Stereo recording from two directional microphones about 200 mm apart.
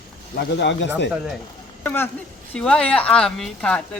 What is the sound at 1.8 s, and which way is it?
Speech, 10° left (ahead or behind).